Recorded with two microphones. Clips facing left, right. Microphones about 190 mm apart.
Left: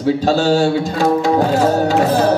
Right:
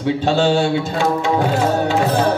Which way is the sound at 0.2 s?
40° left (ahead or behind).